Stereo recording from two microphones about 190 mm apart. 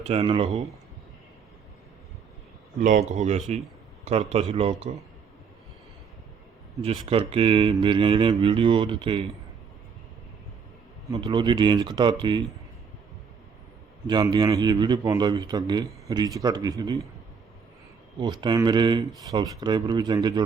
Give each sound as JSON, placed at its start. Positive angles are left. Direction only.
{"t": 0.0, "sound": "a man's voice", "side_deg": -30}
{"t": 2.8, "sound": "a man's voice", "side_deg": -40}
{"t": 6.8, "sound": "a man's voice", "side_deg": -25}
{"t": 11.1, "sound": "a man's voice", "side_deg": -25}
{"t": 14.1, "sound": "a man's voice", "side_deg": -20}
{"t": 18.3, "sound": "a man's voice", "side_deg": -20}